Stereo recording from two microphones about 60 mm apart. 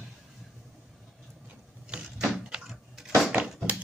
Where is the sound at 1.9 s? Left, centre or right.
Centre.